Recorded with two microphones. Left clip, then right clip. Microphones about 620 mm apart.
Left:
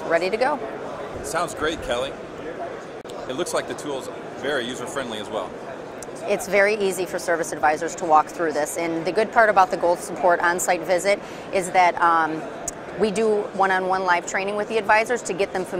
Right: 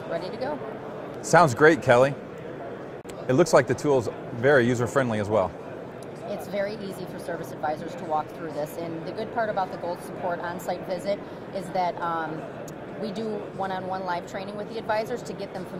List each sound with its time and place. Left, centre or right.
0.1 s a woman's voice: left
1.3 s speech: right
3.3 s speech: right
6.3 s a woman's voice: left